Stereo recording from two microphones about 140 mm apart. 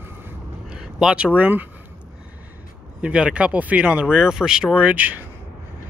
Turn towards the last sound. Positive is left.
turn(degrees=-10)  # may be behind; listen again after turning